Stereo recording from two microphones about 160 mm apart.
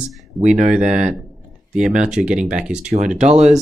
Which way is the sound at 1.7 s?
5° right (ahead or behind).